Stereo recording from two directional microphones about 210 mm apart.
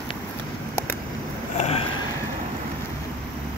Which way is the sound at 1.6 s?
30° left (ahead or behind).